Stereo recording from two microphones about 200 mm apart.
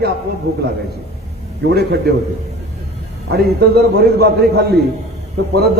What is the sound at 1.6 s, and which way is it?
Speech, 55° right (ahead or behind).